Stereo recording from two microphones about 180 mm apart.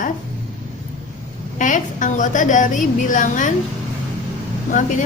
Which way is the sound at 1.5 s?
45° left (ahead or behind).